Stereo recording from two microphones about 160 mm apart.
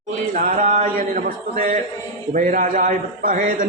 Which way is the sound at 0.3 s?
50° right (ahead or behind).